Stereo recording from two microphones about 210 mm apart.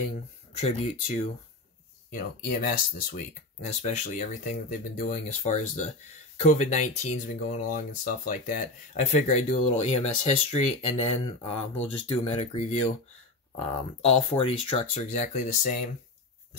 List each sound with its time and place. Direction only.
0.6 s speech: 30° left (ahead or behind)
14.0 s speech: 30° left (ahead or behind)